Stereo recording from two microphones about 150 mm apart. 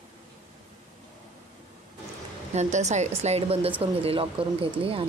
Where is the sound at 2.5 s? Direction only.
50° right (ahead or behind).